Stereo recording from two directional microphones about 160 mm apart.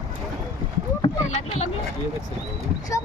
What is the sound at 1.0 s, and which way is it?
Rowboat, 40° left (ahead or behind).